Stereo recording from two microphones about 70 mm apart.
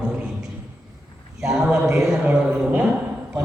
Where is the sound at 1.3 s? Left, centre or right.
Centre.